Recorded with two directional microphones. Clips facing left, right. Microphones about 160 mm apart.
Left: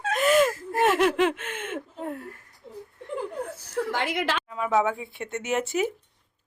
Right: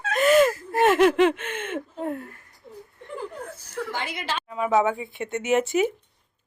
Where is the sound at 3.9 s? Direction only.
85° left.